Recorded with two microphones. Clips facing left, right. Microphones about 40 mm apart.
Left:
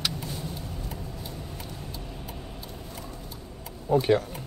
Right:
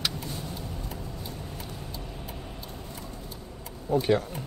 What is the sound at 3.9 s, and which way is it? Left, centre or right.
Typing, centre.